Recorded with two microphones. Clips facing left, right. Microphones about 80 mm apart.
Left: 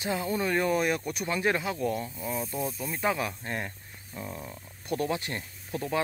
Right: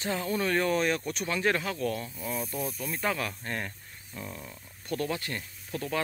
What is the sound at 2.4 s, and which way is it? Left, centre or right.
Speech, centre.